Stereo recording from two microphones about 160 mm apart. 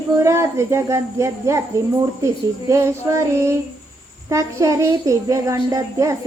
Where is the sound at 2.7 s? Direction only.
15° right (ahead or behind).